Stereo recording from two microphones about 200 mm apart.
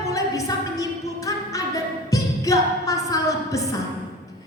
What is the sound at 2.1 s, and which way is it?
Music, 15° left (ahead or behind).